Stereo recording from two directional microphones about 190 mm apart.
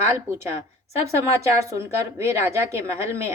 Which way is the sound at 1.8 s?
15° right (ahead or behind).